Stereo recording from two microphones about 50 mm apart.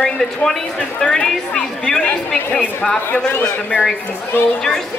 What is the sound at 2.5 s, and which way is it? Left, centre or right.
Speech, left.